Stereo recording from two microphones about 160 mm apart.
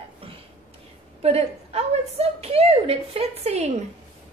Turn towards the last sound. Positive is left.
turn(degrees=-40)  # may be behind; listen again after turning